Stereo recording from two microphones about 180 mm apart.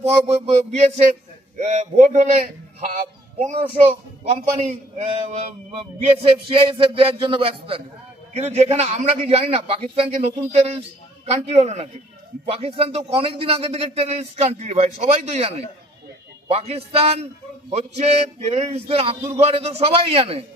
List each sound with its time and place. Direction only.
0.0 s a man's voice: 35° right (ahead or behind)
3.3 s a man's voice: 35° right (ahead or behind)